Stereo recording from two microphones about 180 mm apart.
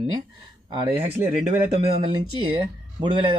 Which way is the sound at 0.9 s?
10° right (ahead or behind).